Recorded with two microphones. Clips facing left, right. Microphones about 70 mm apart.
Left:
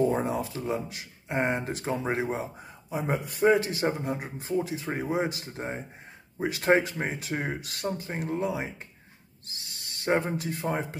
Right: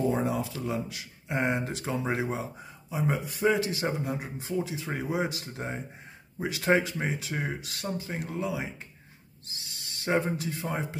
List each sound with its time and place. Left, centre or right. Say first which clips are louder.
0.1 s a man's voice: even; left
2.9 s a man's voice: even; left